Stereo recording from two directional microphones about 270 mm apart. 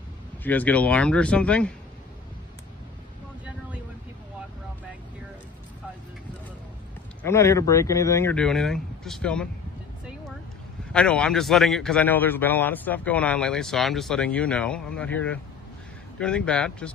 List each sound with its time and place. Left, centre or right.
0.4 s a man's voice: centre
7.2 s speech: centre
10.9 s a man's voice: centre